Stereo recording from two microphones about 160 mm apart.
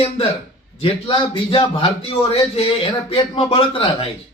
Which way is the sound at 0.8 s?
35° left (ahead or behind).